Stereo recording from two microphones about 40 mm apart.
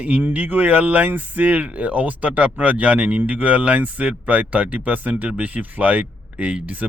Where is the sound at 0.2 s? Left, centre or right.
Right.